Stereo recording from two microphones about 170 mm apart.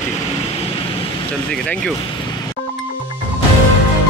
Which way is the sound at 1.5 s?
5° left (ahead or behind).